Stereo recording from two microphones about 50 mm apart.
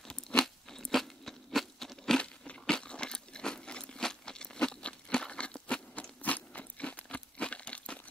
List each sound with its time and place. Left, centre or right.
0.1 s crunch: centre
2.6 s a sound: centre
6.2 s biting: left
7.1 s crumpling: left